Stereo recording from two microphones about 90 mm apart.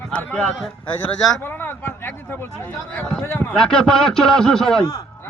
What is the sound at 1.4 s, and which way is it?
A man's voice, 25° left (ahead or behind).